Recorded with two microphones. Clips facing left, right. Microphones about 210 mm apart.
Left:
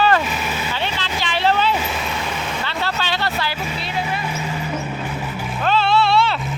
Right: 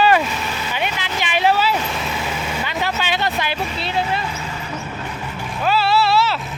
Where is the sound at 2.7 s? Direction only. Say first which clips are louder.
Right 2 dB; 15° right (ahead or behind).